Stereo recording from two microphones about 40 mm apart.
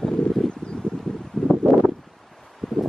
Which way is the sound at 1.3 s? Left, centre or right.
Centre.